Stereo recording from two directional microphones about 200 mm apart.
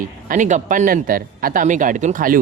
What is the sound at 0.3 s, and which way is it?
Speech, 40° right (ahead or behind).